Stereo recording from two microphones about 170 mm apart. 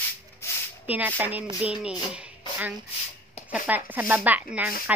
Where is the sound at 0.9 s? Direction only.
10° right (ahead or behind).